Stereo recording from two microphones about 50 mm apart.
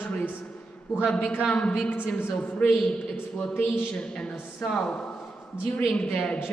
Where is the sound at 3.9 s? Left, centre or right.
Centre.